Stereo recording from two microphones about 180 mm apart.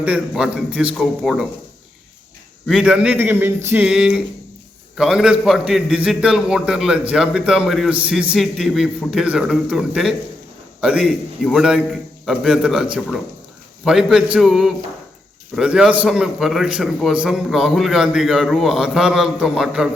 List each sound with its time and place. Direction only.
0.0 s a man's voice: 5° right (ahead or behind)
2.6 s a man's voice: 5° right (ahead or behind)